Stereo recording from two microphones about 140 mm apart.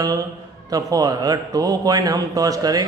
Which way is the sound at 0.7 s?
25° right (ahead or behind).